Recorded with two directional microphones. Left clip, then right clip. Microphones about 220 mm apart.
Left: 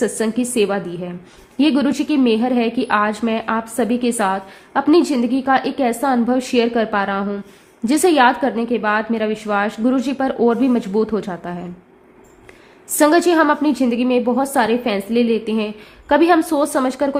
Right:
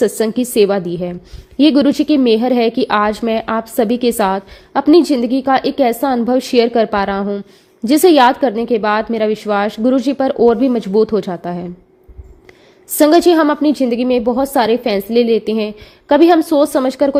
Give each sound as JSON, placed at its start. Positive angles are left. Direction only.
{"t": 0.2, "sound": "a woman's voice", "side_deg": -30}
{"t": 12.9, "sound": "a woman's voice", "side_deg": -25}